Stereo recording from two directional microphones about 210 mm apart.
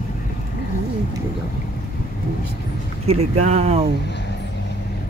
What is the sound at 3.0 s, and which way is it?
Speech, 30° right (ahead or behind).